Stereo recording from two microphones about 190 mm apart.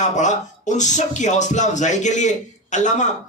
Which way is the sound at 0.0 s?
40° left (ahead or behind).